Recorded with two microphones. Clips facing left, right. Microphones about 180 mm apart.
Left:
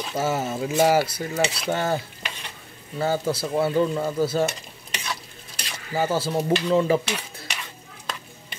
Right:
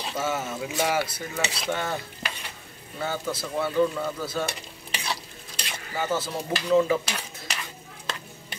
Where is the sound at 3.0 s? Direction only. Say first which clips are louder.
Left 6 dB; 35° left (ahead or behind).